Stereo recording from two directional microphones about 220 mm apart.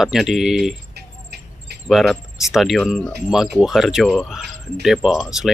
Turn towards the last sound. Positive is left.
turn(degrees=-5)  # may be behind; listen again after turning